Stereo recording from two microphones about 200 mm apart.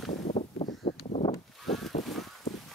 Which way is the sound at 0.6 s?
25° left (ahead or behind).